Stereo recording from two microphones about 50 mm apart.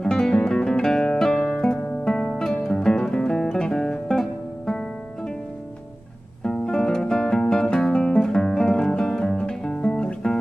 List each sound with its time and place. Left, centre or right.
0.0 s guitar: centre
2.7 s music: centre
3.5 s guitar: centre
6.4 s music: centre